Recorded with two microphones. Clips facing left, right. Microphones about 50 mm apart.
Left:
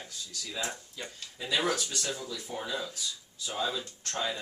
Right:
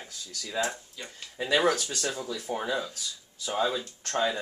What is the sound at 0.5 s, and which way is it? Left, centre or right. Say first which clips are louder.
Mantra: right 6 dB; right.